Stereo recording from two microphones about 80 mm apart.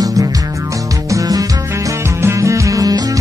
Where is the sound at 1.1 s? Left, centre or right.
Right.